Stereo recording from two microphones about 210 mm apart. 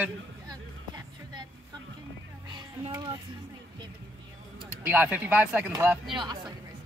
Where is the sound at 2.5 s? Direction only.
20° right (ahead or behind).